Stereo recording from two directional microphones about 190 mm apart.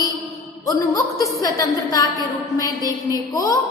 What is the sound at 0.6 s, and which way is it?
A woman's voice, 15° left (ahead or behind).